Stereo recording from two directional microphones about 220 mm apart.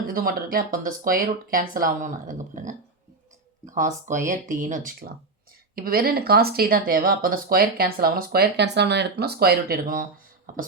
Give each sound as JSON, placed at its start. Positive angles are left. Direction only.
{"t": 0.1, "sound": "speech", "side_deg": -40}
{"t": 3.8, "sound": "speech", "side_deg": -35}